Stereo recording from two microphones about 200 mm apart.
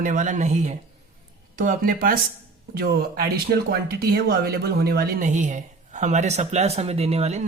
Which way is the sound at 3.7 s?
50° right (ahead or behind).